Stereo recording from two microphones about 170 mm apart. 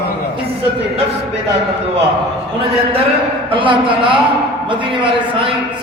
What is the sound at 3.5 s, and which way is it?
Speech, 30° right (ahead or behind).